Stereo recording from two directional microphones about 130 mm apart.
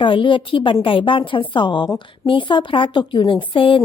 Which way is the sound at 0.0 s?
40° left (ahead or behind).